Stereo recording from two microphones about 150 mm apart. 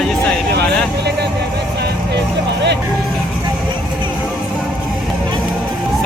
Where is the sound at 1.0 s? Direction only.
90° right.